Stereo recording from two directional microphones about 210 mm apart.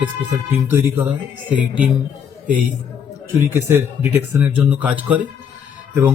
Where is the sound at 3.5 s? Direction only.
10° right (ahead or behind).